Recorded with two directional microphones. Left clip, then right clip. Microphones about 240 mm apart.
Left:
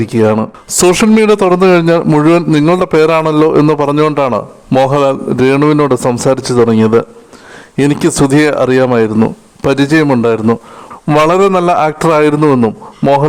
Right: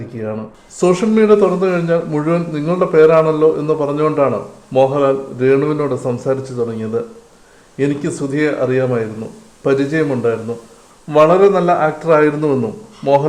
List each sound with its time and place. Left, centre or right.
0.0 s speech: left